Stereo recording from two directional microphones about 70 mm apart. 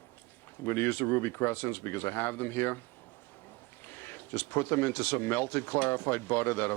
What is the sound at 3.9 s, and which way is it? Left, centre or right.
Speech, left.